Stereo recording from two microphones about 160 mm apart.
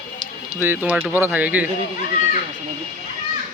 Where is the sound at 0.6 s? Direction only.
10° right (ahead or behind).